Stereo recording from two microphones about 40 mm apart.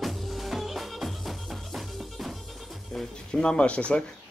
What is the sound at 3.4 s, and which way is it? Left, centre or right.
Speech, left.